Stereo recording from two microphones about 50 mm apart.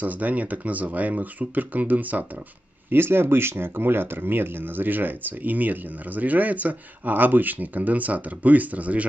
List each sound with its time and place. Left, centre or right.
0.0 s speech: right
2.9 s speech: right